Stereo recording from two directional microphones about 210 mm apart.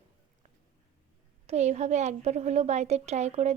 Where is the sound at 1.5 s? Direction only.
30° right (ahead or behind).